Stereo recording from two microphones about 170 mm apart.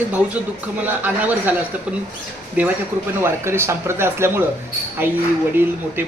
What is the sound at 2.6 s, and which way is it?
Speech, 10° right (ahead or behind).